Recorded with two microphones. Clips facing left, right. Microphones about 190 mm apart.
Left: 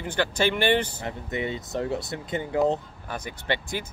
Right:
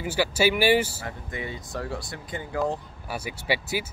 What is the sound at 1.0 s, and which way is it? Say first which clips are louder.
Speech: left 5 dB; 20° left (ahead or behind).